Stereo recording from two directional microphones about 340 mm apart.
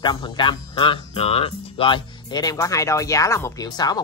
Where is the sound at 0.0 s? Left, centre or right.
Centre.